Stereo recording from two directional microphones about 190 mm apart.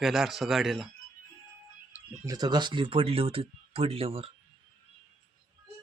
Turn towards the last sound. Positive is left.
turn(degrees=-30)  # may be behind; listen again after turning